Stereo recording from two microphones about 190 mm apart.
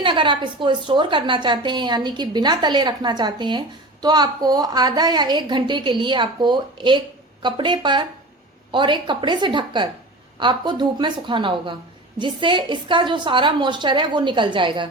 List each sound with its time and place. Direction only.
0.0 s a woman's voice: 25° right (ahead or behind)